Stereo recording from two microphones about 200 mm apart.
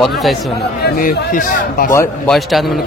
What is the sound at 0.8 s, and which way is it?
A man's voice, 50° left (ahead or behind).